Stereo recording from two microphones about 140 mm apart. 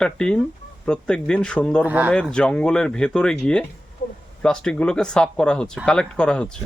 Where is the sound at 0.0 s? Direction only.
5° left (ahead or behind).